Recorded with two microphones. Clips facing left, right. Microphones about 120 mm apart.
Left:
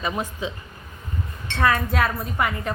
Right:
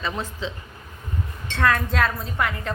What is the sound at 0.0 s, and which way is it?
Speech, 15° left (ahead or behind).